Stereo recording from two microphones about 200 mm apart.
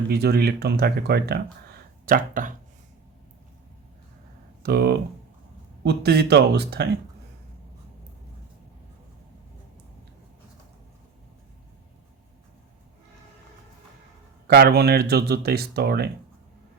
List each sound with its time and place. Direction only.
0.1 s speech: 55° right (ahead or behind)
4.6 s speech: 55° right (ahead or behind)
14.4 s speech: 50° right (ahead or behind)